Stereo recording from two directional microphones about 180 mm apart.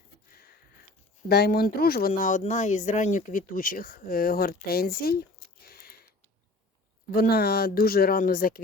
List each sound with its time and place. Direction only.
1.3 s speech: 60° left (ahead or behind)
5.6 s a sound: 55° left (ahead or behind)
7.1 s speech: 60° left (ahead or behind)